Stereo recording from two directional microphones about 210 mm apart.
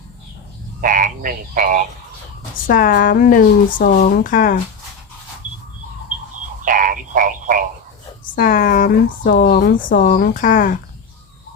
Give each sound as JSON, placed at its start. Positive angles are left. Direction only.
{"t": 0.8, "sound": "speech", "side_deg": -40}
{"t": 2.6, "sound": "speech", "side_deg": 40}
{"t": 6.6, "sound": "a sound", "side_deg": -40}
{"t": 8.4, "sound": "speech", "side_deg": 40}